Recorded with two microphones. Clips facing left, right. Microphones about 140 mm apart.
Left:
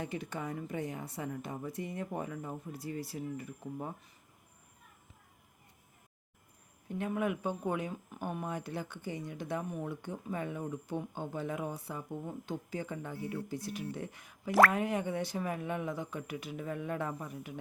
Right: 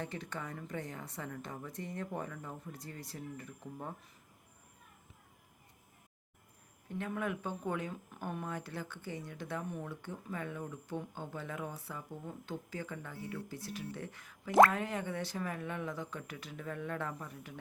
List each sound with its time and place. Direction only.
0.0 s speech: 10° left (ahead or behind)
6.8 s speech: 15° left (ahead or behind)